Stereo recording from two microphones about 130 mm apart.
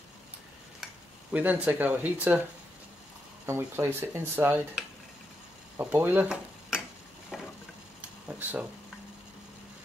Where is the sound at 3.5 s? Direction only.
15° right (ahead or behind).